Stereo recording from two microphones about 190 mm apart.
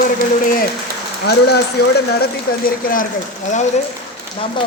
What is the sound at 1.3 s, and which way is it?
Speech, 60° left (ahead or behind).